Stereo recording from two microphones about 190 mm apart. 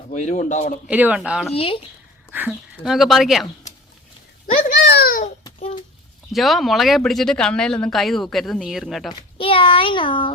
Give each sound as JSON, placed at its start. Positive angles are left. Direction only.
{"t": 0.1, "sound": "a man's voice", "side_deg": 40}
{"t": 0.9, "sound": "speech", "side_deg": -10}
{"t": 1.5, "sound": "child singing", "side_deg": 30}
{"t": 2.3, "sound": "speech", "side_deg": -5}
{"t": 4.8, "sound": "a sound", "side_deg": 60}
{"t": 5.5, "sound": "a sound", "side_deg": 30}
{"t": 6.3, "sound": "speech", "side_deg": 0}
{"t": 9.4, "sound": "child singing", "side_deg": 30}